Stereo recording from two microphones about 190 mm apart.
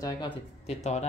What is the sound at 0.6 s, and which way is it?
Speech, 35° left (ahead or behind).